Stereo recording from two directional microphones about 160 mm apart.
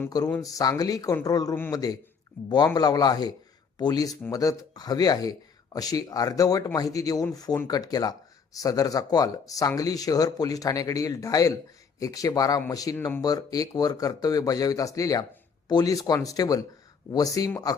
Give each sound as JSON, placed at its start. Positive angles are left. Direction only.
{"t": 0.3, "sound": "speech", "side_deg": 15}